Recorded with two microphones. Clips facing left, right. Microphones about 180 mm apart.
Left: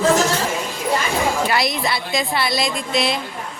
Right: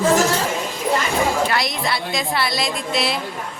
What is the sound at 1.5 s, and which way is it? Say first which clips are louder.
A woman's voice: left 2 dB; centre (ahead or behind).